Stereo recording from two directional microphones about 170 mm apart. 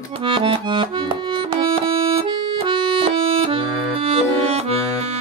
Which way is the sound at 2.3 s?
30° right (ahead or behind).